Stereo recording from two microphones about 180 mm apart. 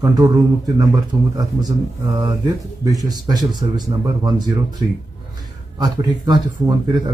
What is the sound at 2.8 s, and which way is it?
Speech, 20° right (ahead or behind).